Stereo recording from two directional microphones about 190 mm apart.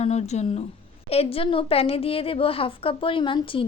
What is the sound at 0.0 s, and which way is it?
Speech, 35° left (ahead or behind).